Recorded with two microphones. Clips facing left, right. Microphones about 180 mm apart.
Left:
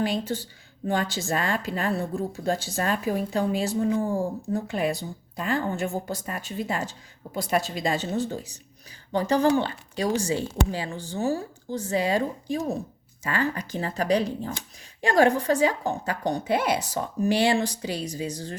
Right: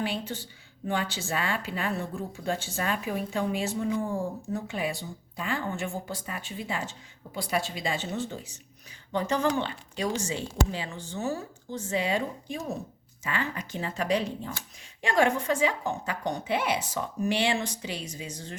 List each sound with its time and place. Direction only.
0.0 s speech: 40° left (ahead or behind)